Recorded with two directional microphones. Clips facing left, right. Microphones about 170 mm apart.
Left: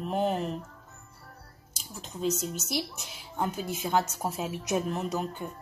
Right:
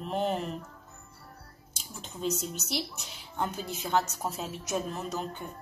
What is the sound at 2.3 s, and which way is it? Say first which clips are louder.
Speech: left 2 dB; 45° left (ahead or behind).